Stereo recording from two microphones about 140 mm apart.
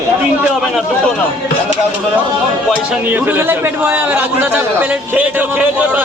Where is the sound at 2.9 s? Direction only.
10° right (ahead or behind).